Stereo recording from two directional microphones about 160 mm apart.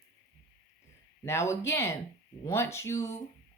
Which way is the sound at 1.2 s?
15° left (ahead or behind).